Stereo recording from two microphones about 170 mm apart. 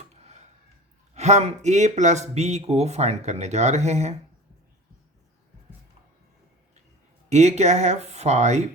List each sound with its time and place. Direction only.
0.1 s a sound: 40° right (ahead or behind)
1.1 s speech: 40° right (ahead or behind)
7.3 s speech: 40° right (ahead or behind)